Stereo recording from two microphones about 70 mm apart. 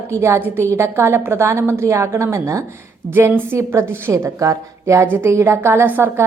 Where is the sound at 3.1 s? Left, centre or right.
Right.